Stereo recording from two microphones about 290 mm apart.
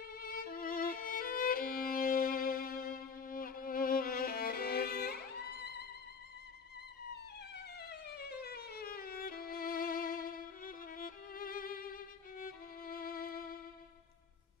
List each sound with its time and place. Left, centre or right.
0.1 s violin: left
7.9 s music: left